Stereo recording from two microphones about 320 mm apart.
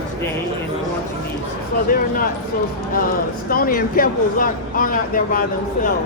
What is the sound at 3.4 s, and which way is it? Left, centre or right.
Speech, left.